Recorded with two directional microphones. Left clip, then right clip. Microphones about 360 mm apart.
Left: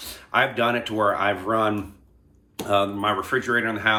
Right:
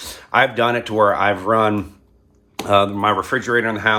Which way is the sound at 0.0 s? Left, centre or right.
Centre.